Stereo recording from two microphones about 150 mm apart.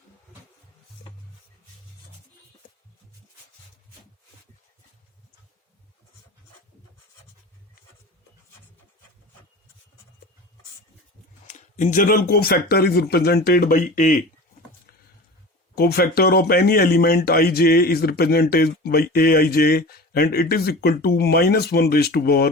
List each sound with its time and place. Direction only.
11.4 s speech: 55° left (ahead or behind)
15.7 s speech: 90° left